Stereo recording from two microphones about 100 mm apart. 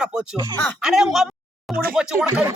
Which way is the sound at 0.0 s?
5° right (ahead or behind).